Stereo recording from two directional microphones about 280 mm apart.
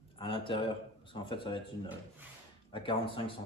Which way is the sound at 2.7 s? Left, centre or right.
Centre.